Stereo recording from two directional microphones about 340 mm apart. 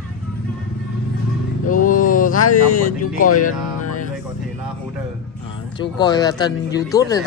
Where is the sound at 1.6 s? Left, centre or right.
Left.